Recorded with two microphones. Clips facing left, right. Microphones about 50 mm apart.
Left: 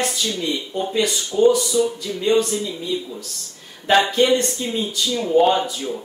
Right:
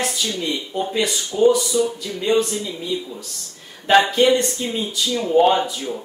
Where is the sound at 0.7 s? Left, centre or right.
Centre.